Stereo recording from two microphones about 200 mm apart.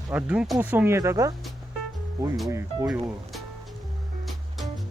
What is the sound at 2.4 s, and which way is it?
Speech, 15° right (ahead or behind).